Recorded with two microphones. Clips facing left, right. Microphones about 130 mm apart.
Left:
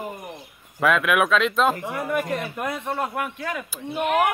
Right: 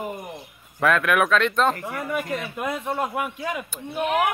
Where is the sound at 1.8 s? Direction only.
15° left (ahead or behind).